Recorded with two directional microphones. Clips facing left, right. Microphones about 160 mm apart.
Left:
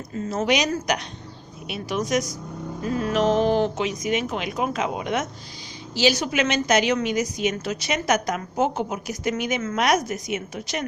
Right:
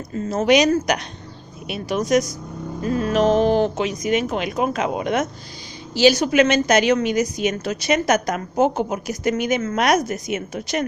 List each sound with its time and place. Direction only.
0.3 s a woman's voice: 45° right (ahead or behind)
3.0 s music: 40° right (ahead or behind)
4.0 s a woman's voice: 50° right (ahead or behind)